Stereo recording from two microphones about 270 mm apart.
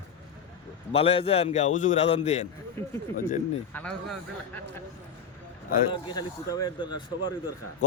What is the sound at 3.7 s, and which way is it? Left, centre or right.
Speech, centre.